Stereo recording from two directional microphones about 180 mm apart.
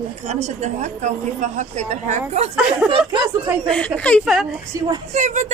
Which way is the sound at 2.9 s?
30° right (ahead or behind).